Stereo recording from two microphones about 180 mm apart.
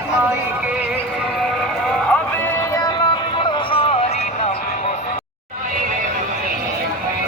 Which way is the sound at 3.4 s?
30° left (ahead or behind).